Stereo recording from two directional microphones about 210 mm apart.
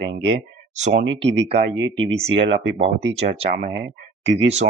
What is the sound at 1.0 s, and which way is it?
Speech, 60° right (ahead or behind).